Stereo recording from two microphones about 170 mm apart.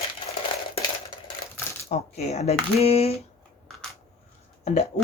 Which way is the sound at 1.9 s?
40° left (ahead or behind).